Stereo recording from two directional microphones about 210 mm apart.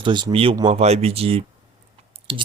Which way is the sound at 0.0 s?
20° right (ahead or behind).